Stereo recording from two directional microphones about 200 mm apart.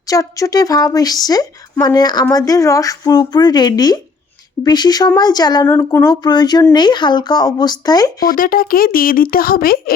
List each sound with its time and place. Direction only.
0.1 s speech: 15° left (ahead or behind)
8.4 s speech: 45° left (ahead or behind)